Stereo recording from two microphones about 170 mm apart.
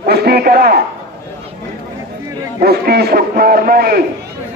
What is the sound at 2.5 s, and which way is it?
A man's voice, 65° right (ahead or behind).